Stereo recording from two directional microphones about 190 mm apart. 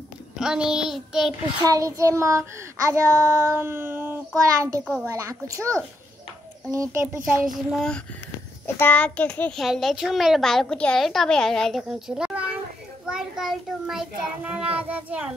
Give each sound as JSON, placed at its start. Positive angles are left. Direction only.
{"t": 0.4, "sound": "a woman's voice", "side_deg": -5}
{"t": 1.6, "sound": "child singing", "side_deg": -20}
{"t": 8.6, "sound": "a child's voice", "side_deg": 10}